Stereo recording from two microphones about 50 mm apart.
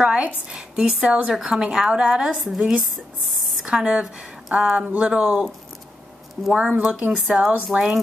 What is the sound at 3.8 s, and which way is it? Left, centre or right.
Speech, right.